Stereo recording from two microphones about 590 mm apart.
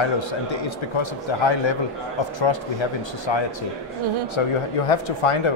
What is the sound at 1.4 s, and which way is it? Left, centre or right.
Speech, left.